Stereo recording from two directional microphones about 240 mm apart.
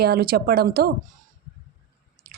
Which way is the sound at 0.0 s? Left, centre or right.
Right.